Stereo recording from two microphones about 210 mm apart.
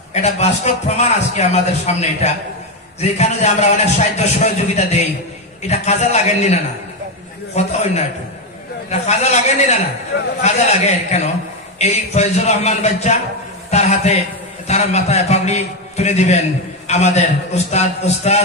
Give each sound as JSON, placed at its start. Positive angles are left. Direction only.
{"t": 0.1, "sound": "a man's voice", "side_deg": 30}
{"t": 5.6, "sound": "a man's voice", "side_deg": 30}
{"t": 7.5, "sound": "a sound", "side_deg": 30}
{"t": 8.9, "sound": "a man's voice", "side_deg": 30}